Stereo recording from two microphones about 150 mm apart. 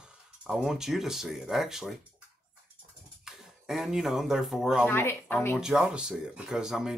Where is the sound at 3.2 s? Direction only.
5° right (ahead or behind).